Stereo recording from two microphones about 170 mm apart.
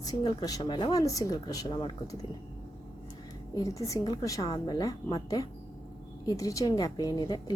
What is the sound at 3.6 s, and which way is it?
Speech, 20° left (ahead or behind).